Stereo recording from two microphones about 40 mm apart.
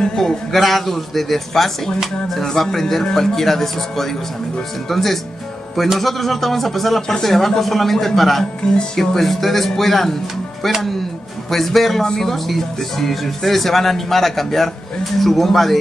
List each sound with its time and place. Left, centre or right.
0.0 s a sound: centre
0.5 s a man's voice: centre
11.5 s speech: centre